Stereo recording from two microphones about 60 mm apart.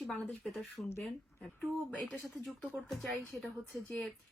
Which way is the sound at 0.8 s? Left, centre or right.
Left.